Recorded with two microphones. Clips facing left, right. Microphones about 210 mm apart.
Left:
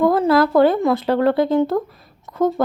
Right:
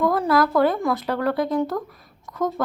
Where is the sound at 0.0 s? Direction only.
25° left (ahead or behind).